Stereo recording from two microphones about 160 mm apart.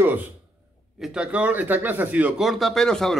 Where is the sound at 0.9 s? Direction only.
5° right (ahead or behind).